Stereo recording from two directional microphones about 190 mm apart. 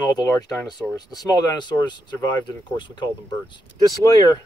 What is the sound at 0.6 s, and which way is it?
Speech, 15° left (ahead or behind).